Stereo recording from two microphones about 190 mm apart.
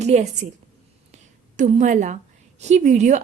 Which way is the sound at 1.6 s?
40° right (ahead or behind).